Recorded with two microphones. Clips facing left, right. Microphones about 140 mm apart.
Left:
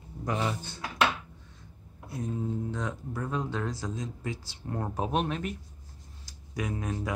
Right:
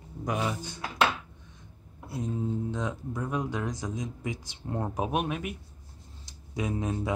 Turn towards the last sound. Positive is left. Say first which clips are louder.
# right 3 dB
turn(degrees=-25)  # may be behind; listen again after turning